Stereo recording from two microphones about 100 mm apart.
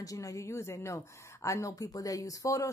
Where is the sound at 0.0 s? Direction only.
35° left (ahead or behind).